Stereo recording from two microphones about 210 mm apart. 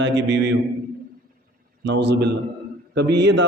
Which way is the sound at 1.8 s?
55° right (ahead or behind).